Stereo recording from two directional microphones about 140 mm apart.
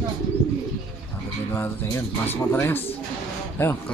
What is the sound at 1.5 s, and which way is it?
Speech, 15° left (ahead or behind).